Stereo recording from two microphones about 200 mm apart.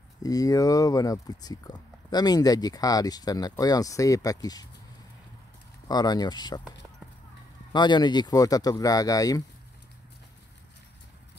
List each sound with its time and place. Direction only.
0.2 s speech: 15° left (ahead or behind)
5.9 s speech: 20° left (ahead or behind)
7.7 s speech: 20° left (ahead or behind)